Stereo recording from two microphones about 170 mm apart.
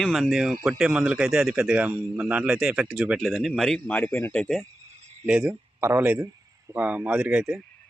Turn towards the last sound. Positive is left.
turn(degrees=-5)  # may be behind; listen again after turning